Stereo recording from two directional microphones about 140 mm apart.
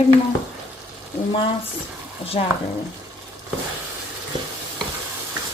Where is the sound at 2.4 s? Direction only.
50° left (ahead or behind).